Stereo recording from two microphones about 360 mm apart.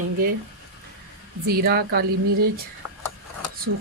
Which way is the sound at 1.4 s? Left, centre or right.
Right.